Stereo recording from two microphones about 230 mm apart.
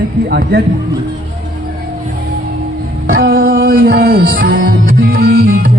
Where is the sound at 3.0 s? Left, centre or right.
Right.